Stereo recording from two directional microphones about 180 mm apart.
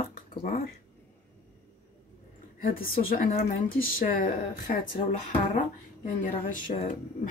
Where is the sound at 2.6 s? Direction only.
55° left (ahead or behind).